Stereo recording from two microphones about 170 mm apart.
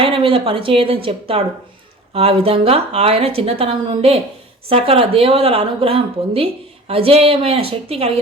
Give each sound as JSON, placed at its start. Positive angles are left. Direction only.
{"t": 0.0, "sound": "speech", "side_deg": -30}